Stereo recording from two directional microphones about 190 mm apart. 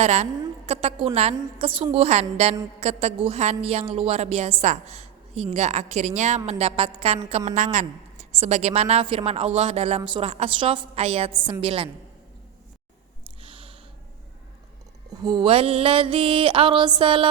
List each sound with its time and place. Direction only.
0.0 s a woman's voice: 35° right (ahead or behind)
11.6 s music: 30° right (ahead or behind)
13.4 s a sound: 30° right (ahead or behind)
15.1 s music: 20° right (ahead or behind)